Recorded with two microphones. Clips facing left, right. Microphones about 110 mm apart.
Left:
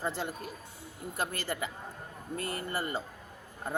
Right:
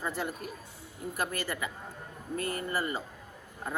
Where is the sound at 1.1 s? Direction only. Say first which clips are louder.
Even; 30° left (ahead or behind).